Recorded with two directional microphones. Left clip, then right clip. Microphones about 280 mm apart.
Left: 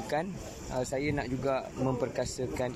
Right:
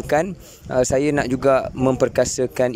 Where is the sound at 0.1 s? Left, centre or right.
Right.